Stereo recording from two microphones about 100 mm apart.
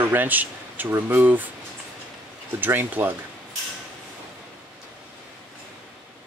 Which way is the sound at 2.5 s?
20° right (ahead or behind).